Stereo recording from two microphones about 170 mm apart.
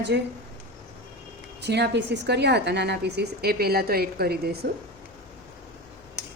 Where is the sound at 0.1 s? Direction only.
85° right.